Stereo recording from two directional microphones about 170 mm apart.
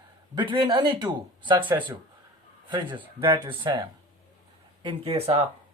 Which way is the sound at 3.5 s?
25° right (ahead or behind).